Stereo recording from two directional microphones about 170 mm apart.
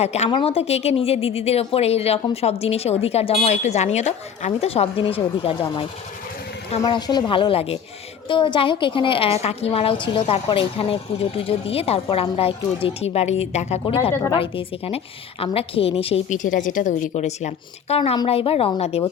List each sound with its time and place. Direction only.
0.0 s a woman's voice: 40° left (ahead or behind)
6.8 s a woman's voice: 25° left (ahead or behind)
16.4 s a woman's voice: 50° left (ahead or behind)